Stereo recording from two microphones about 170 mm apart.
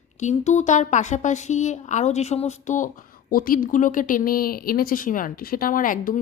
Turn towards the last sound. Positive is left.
turn(degrees=55)  # may be behind; listen again after turning